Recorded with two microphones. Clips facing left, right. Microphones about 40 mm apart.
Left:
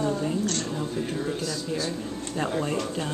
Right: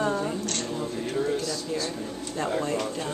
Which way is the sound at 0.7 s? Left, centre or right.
Centre.